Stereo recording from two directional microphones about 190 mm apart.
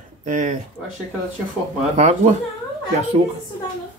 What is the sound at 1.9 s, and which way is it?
Speech, 40° right (ahead or behind).